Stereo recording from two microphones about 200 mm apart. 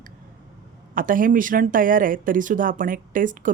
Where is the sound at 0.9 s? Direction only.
45° right (ahead or behind).